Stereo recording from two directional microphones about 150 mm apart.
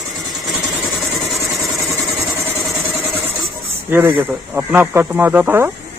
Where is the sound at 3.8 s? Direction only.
15° right (ahead or behind).